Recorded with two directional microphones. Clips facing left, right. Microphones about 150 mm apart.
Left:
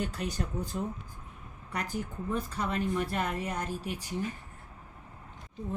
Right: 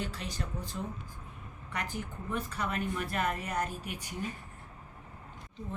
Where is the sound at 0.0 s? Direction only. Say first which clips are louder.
Left 4 dB; 45° left (ahead or behind).